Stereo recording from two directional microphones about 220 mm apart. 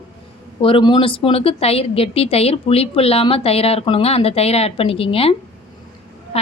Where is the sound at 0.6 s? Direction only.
20° left (ahead or behind).